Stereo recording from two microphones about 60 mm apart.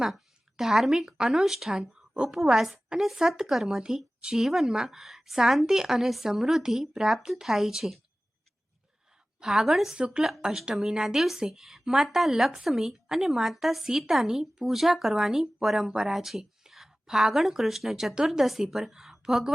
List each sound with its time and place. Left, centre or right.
0.5 s a woman's voice: centre
1.8 s speech: centre
2.4 s a woman's voice: centre
9.4 s a woman's voice: centre